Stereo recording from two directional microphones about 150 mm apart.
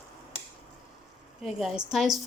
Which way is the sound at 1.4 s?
Centre (ahead or behind).